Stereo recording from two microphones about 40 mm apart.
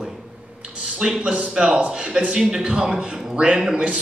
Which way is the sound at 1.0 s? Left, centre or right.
Centre.